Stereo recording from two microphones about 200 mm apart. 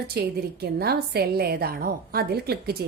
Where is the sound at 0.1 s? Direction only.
55° right (ahead or behind).